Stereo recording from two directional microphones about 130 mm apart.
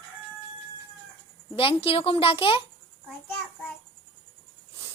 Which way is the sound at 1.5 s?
45° left (ahead or behind).